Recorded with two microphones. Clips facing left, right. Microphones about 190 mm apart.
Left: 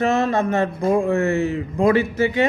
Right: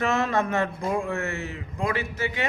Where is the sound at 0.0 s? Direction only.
30° left (ahead or behind).